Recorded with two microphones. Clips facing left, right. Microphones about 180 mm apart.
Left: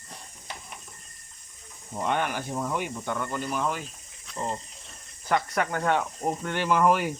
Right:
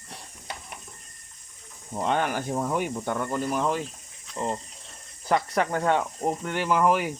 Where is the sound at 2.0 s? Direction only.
35° right (ahead or behind).